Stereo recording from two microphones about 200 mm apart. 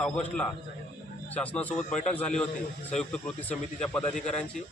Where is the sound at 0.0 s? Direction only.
5° left (ahead or behind).